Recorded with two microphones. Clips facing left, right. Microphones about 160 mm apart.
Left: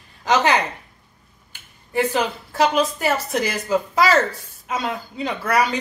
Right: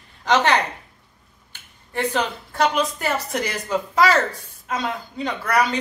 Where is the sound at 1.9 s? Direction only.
5° left (ahead or behind).